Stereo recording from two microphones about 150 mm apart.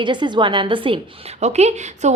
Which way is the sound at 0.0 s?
30° right (ahead or behind).